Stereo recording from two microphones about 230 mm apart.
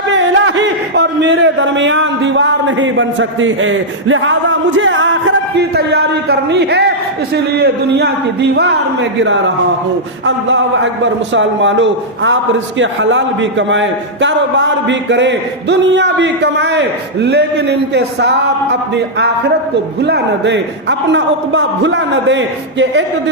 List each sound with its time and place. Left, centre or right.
0.1 s a man's voice: right